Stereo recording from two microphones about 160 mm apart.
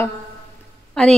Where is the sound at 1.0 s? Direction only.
5° left (ahead or behind).